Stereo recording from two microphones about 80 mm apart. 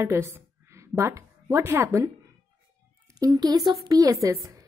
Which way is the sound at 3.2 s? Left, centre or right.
Right.